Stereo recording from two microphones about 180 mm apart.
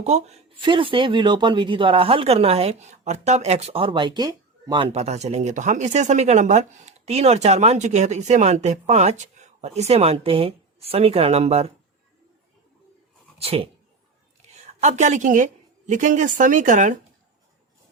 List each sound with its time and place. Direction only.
0.0 s speech: 40° right (ahead or behind); by 4.9 s 20° right (ahead or behind)
4.9 s speech: 40° right (ahead or behind)
13.4 s speech: 35° right (ahead or behind)
14.8 s a woman's voice: 40° right (ahead or behind)